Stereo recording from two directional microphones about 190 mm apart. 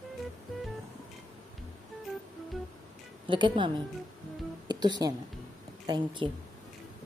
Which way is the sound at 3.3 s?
25° right (ahead or behind).